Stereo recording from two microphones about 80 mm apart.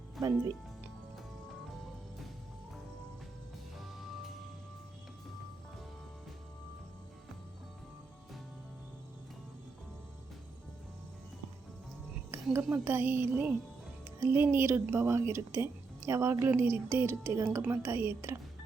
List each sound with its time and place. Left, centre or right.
0.2 s speech: right
3.8 s music: centre
12.7 s a woman's voice: right
14.2 s a woman's voice: right